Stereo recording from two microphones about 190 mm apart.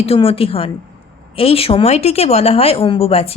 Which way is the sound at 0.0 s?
30° left (ahead or behind).